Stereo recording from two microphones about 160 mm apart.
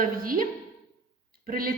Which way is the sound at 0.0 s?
60° right (ahead or behind).